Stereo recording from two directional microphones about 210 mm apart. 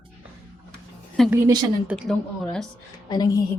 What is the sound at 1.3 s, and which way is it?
Speech, 10° right (ahead or behind).